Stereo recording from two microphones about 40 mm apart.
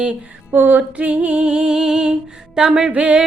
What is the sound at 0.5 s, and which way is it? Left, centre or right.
Music, right.